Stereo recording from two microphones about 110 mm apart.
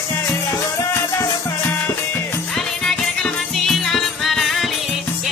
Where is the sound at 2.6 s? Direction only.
5° left (ahead or behind).